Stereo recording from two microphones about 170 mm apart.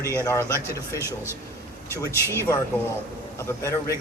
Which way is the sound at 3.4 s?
15° left (ahead or behind).